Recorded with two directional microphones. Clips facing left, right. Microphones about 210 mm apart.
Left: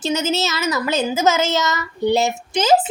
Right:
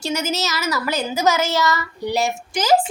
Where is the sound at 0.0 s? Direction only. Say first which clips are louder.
Left 3 dB; 20° left (ahead or behind).